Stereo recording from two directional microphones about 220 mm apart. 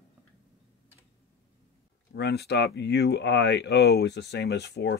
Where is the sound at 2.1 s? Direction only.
50° left (ahead or behind).